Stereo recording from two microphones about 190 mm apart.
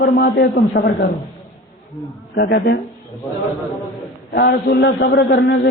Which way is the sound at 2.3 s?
60° left (ahead or behind).